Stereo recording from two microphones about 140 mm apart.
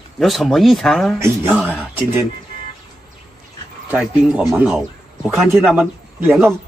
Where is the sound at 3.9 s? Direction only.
10° right (ahead or behind).